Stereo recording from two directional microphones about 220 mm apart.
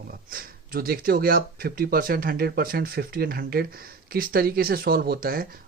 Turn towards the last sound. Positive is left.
turn(degrees=-40)  # may be behind; listen again after turning